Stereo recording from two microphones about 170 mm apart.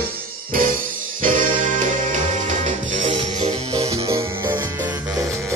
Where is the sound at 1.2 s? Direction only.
50° right (ahead or behind).